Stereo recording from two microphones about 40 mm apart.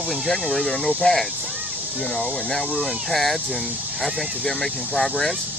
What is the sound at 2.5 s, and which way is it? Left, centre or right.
Speech, centre.